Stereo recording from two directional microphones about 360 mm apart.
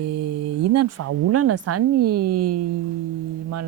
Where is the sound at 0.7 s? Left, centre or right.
Right.